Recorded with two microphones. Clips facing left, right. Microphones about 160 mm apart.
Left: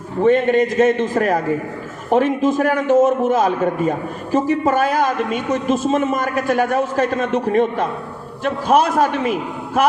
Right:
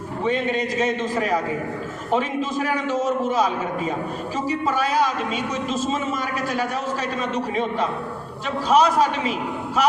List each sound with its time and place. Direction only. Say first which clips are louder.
0.3 s a man's voice: left 9 dB; 55° left (ahead or behind)